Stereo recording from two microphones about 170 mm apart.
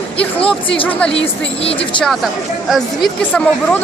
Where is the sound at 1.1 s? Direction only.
35° left (ahead or behind).